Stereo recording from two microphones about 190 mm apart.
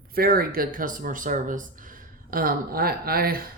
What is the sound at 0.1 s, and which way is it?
Speech, 50° right (ahead or behind).